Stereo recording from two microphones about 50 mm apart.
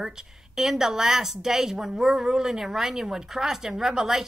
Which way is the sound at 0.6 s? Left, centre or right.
Centre.